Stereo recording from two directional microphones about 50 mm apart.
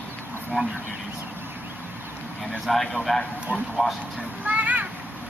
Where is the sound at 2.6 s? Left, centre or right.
Centre.